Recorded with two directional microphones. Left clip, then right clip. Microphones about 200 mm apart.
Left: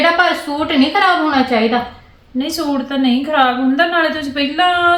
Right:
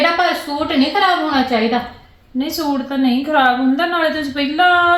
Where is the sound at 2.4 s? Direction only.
15° left (ahead or behind).